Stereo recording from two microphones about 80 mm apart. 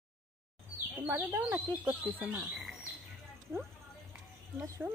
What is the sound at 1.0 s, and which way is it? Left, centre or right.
Speech, right.